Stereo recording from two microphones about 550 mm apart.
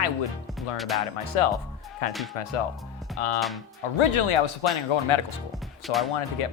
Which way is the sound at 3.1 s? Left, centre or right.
Left.